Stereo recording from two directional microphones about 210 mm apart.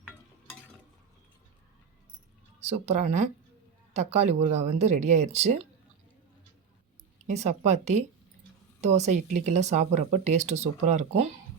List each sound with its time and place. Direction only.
2.6 s speech: 30° right (ahead or behind)
7.3 s speech: 30° right (ahead or behind)